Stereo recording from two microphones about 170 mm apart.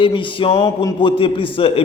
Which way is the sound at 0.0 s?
30° left (ahead or behind).